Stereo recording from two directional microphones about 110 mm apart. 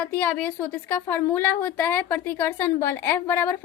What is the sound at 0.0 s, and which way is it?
A woman's voice, 15° left (ahead or behind).